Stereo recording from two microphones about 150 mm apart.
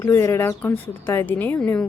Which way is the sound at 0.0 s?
15° left (ahead or behind).